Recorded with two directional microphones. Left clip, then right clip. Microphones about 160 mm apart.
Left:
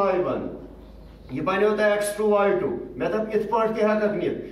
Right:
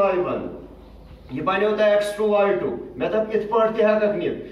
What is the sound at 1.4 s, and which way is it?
A man's voice, 10° left (ahead or behind).